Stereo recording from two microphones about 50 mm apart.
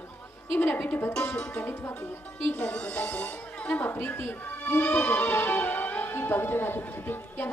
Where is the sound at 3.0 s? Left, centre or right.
Left.